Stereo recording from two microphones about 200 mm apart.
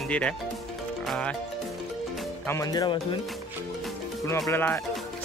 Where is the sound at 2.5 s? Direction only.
15° left (ahead or behind).